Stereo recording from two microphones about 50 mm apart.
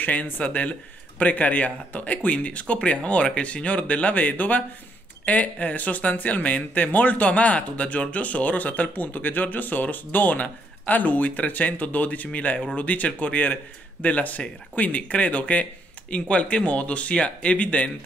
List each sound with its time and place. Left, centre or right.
0.0 s speech: left